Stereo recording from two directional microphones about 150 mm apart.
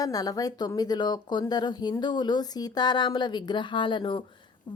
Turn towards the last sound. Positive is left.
turn(degrees=30)  # may be behind; listen again after turning